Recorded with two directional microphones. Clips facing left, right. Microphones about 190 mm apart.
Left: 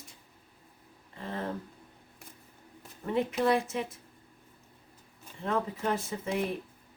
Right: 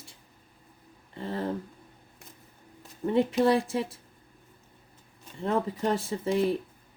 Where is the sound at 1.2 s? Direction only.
35° right (ahead or behind).